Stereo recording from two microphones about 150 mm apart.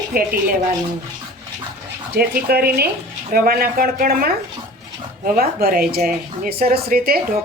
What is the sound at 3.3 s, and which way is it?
Speech, 80° right.